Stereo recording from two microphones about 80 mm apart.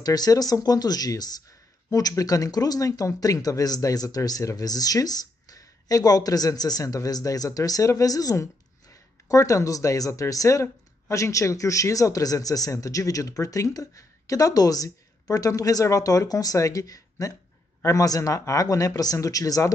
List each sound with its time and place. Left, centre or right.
0.0 s speech: left